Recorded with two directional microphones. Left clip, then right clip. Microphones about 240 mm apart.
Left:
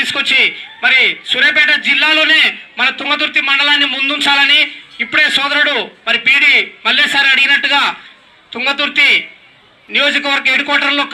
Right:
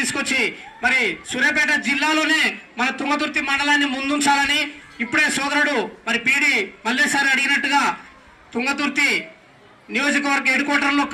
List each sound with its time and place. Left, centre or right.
0.0 s a man's voice: centre